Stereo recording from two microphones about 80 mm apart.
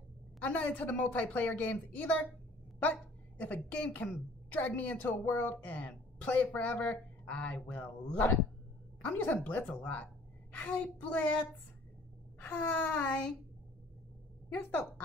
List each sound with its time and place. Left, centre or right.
0.4 s a woman's voice: left
14.5 s a woman's voice: left